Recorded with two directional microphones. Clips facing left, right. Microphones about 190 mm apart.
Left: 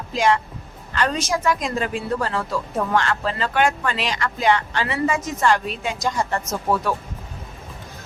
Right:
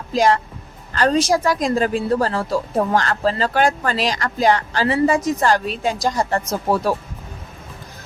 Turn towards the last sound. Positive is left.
turn(degrees=-35)  # may be behind; listen again after turning